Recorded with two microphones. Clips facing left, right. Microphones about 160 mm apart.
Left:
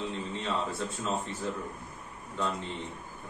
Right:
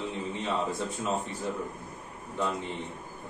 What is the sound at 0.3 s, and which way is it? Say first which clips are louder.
A man's voice: right 4 dB; 15° right (ahead or behind).